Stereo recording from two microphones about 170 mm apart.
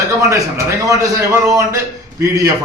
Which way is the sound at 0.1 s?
20° right (ahead or behind).